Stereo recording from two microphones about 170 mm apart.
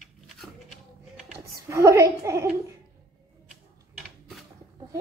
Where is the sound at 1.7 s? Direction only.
15° right (ahead or behind).